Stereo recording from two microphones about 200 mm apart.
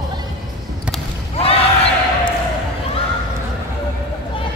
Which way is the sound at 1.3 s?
30° left (ahead or behind).